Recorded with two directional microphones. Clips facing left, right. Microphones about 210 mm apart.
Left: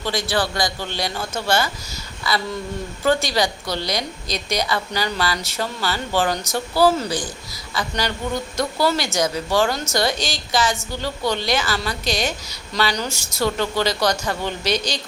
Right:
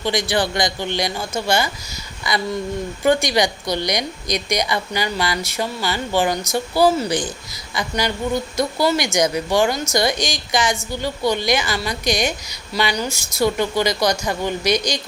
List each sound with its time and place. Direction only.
0.0 s a woman's voice: 15° right (ahead or behind)